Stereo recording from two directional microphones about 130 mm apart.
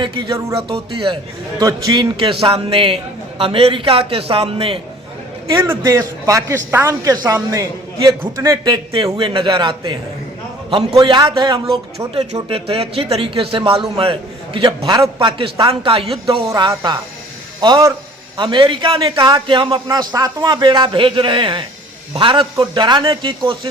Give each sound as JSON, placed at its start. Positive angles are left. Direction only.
{"t": 0.0, "sound": "a man's voice", "side_deg": -40}
{"t": 1.5, "sound": "speech", "side_deg": -30}
{"t": 2.4, "sound": "a man's voice", "side_deg": -45}
{"t": 5.8, "sound": "a man's voice", "side_deg": -25}
{"t": 11.0, "sound": "speech", "side_deg": -35}
{"t": 11.9, "sound": "a man's voice", "side_deg": -50}
{"t": 16.5, "sound": "speech", "side_deg": -30}